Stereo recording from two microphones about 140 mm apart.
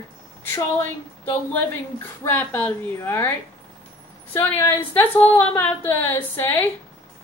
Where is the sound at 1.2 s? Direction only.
15° left (ahead or behind).